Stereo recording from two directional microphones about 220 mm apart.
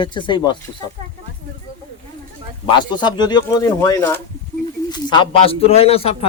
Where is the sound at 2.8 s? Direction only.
20° left (ahead or behind).